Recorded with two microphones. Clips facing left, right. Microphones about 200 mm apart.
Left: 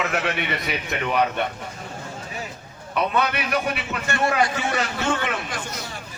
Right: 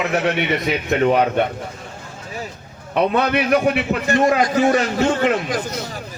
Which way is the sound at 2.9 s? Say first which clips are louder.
Right 6 dB; 55° right (ahead or behind).